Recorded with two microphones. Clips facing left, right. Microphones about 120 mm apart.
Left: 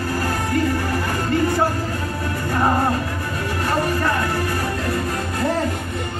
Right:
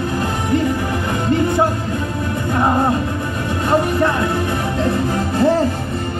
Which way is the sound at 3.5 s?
20° right (ahead or behind).